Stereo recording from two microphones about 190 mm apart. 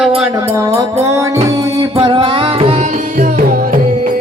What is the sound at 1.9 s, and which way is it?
Music, 30° right (ahead or behind).